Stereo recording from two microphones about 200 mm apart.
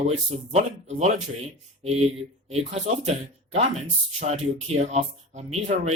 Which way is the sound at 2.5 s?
35° right (ahead or behind).